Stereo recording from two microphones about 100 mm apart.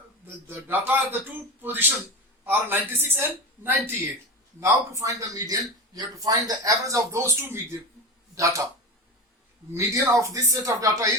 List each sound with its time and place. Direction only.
0.3 s a man's voice: 20° right (ahead or behind)
4.6 s a man's voice: 30° right (ahead or behind)
9.7 s a man's voice: 30° right (ahead or behind)